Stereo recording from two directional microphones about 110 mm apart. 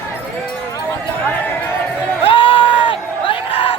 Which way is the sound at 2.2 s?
50° left (ahead or behind).